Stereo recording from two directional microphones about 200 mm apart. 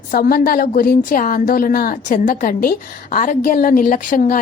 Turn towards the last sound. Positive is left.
turn(degrees=40)  # may be behind; listen again after turning